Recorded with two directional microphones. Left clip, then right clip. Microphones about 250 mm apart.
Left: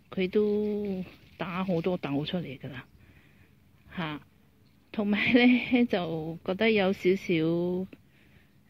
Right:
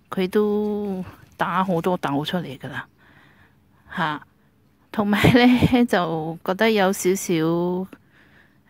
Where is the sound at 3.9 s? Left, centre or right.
Right.